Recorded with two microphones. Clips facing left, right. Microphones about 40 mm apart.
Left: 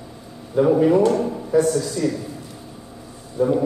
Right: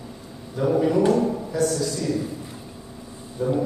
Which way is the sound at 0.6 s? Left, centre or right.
Left.